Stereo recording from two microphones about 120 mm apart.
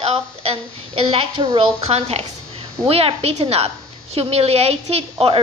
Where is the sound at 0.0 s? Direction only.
50° right (ahead or behind).